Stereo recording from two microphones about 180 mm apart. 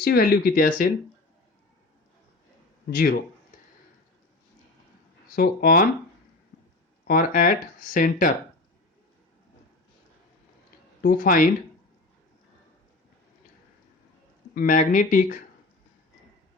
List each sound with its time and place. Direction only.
0.0 s speech: 55° left (ahead or behind)
2.9 s speech: 55° left (ahead or behind)
5.3 s speech: 55° left (ahead or behind)
7.1 s speech: 50° left (ahead or behind)
11.0 s speech: 50° left (ahead or behind)
14.5 s speech: 50° left (ahead or behind)